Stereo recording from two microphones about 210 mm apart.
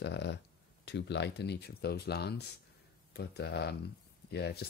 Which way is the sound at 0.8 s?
55° left (ahead or behind).